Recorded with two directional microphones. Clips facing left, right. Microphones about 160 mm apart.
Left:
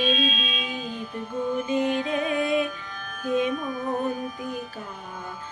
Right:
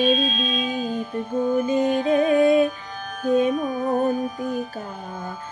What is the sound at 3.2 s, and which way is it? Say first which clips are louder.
Carnatic music: right 5 dB; 40° right (ahead or behind).